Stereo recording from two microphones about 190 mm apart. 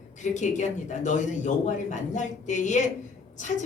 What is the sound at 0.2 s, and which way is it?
A man's voice, 40° left (ahead or behind).